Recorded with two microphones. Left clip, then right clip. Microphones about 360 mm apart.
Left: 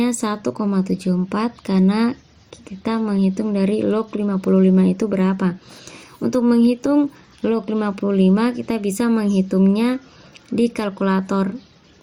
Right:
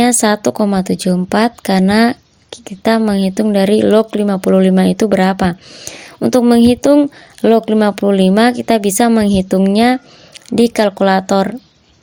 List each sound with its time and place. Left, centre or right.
0.0 s a woman's voice: right